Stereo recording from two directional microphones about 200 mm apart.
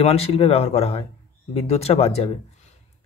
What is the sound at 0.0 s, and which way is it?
Speech, 30° left (ahead or behind).